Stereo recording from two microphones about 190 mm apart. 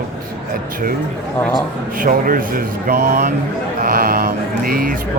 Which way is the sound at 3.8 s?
50° right (ahead or behind).